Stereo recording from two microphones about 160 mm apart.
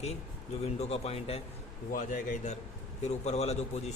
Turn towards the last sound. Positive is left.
turn(degrees=45)  # may be behind; listen again after turning